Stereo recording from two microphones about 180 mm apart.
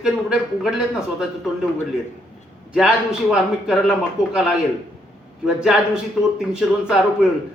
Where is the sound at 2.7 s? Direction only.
5° right (ahead or behind).